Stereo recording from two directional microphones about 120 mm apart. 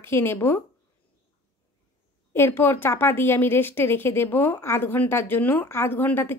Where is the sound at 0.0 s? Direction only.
20° left (ahead or behind).